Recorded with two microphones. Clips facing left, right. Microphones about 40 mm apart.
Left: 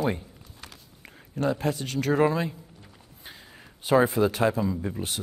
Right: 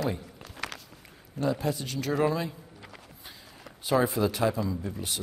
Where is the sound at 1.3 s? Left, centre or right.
Left.